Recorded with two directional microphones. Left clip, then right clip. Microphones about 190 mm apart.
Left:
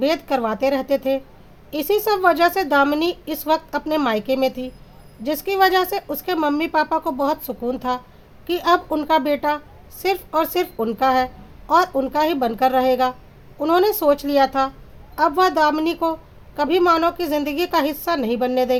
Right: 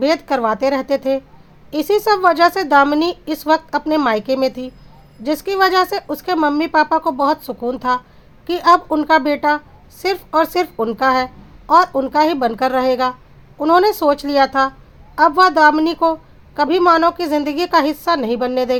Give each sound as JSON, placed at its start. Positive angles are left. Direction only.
{"t": 0.0, "sound": "a woman's voice", "side_deg": -20}